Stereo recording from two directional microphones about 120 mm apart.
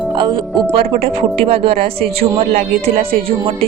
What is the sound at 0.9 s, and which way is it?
Speech, 55° right (ahead or behind).